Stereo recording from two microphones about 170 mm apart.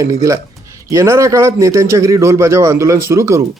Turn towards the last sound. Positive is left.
turn(degrees=-15)  # may be behind; listen again after turning